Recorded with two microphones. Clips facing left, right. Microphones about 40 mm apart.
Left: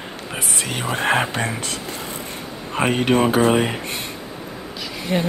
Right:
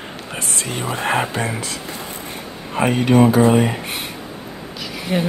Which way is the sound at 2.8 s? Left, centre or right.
Left.